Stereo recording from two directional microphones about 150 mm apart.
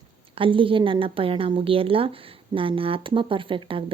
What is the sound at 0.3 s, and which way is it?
Speech, 35° right (ahead or behind).